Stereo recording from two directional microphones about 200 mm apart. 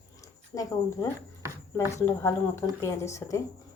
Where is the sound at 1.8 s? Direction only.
15° left (ahead or behind).